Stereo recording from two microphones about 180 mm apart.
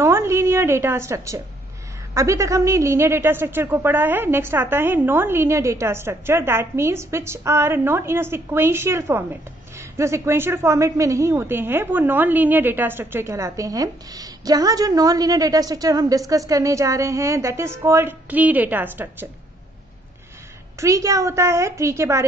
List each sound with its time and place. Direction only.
0.0 s a sound: 15° right (ahead or behind)
2.1 s a man's voice: 15° right (ahead or behind)
20.8 s a man's voice: 20° right (ahead or behind)